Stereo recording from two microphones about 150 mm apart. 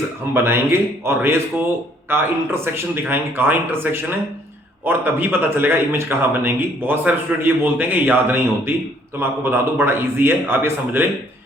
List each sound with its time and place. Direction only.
0.3 s a man's voice: 15° right (ahead or behind)